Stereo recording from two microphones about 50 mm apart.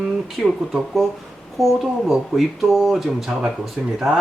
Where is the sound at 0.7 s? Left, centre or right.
Centre.